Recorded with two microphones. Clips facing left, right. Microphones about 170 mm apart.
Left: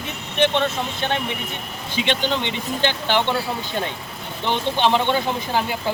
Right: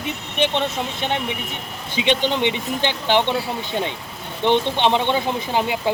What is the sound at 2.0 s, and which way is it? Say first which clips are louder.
Speech: right 4 dB; 20° right (ahead or behind).